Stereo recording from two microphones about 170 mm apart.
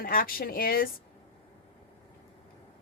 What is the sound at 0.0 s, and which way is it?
Speech, 55° left (ahead or behind).